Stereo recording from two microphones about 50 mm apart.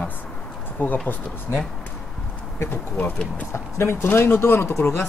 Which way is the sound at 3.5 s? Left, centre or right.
Left.